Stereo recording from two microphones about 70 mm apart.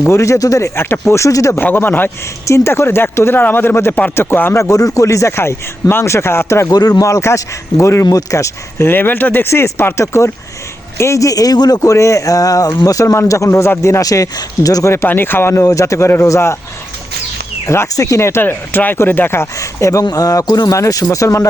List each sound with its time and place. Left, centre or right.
0.0 s speech: left
0.8 s speech: left
1.5 s speech: left
4.6 s speech: left
6.7 s speech: left
7.0 s speech: left
8.9 s speech: left
11.8 s speech: left
14.0 s speech: left
15.0 s speech: left
15.6 s speech: left
17.7 s speech: left
19.5 s speech: left
20.1 s speech: left